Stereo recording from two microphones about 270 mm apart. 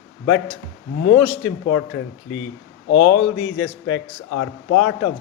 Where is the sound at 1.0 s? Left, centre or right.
Left.